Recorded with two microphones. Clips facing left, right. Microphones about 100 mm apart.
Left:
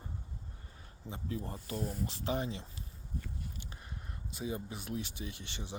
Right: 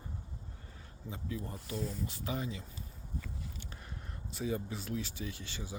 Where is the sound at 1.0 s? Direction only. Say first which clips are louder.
Left 1 dB; 30° left (ahead or behind).